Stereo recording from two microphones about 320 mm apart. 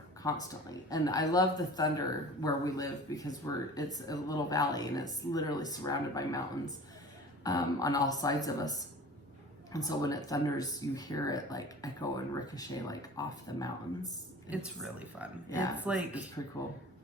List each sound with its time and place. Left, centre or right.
0.4 s speech: centre
14.5 s speech: centre
15.4 s speech: centre
15.8 s speech: centre